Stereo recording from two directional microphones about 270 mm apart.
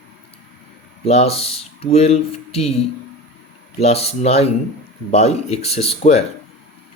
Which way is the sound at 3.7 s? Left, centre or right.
Left.